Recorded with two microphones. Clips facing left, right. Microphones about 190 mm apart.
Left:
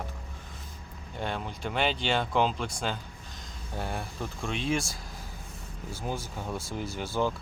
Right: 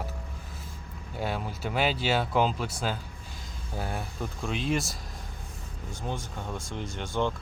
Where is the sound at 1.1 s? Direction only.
5° right (ahead or behind).